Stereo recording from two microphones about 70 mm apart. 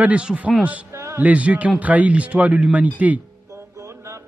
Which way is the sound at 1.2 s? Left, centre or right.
Centre.